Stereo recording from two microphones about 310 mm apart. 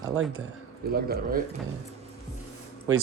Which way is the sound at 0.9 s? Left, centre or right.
Right.